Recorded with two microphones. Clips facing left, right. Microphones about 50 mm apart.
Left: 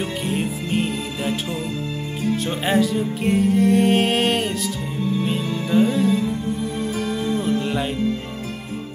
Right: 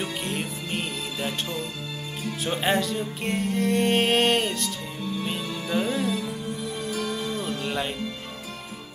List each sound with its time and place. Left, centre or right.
0.0 s music: centre
2.3 s music: centre
6.6 s music: left
7.0 s music: centre